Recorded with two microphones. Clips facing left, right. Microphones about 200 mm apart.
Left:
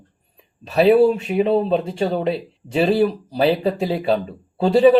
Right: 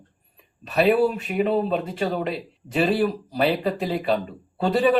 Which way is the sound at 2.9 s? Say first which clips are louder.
Left 4 dB; 30° left (ahead or behind).